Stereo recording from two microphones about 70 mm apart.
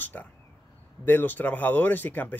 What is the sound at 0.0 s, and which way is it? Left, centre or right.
Speech, left.